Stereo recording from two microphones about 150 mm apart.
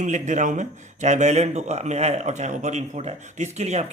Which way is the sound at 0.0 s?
55° right (ahead or behind).